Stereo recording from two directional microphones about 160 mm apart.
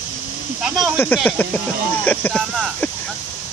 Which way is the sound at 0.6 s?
5° right (ahead or behind).